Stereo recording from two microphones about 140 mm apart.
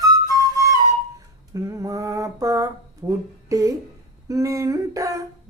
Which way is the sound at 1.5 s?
25° right (ahead or behind).